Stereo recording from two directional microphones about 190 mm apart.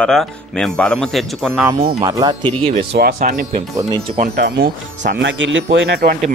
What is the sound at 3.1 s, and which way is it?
Speech, 40° right (ahead or behind).